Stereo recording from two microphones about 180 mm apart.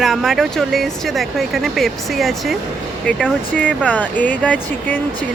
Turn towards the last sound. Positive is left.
turn(degrees=10)  # may be behind; listen again after turning